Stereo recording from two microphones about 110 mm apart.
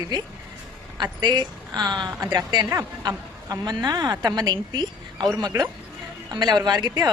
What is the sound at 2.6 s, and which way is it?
Speech, 30° right (ahead or behind).